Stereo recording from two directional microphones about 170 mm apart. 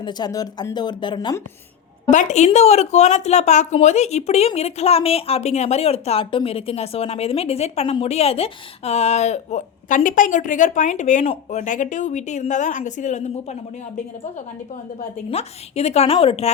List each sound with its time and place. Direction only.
0.0 s speech: 25° left (ahead or behind)
2.0 s a woman's voice: 45° left (ahead or behind)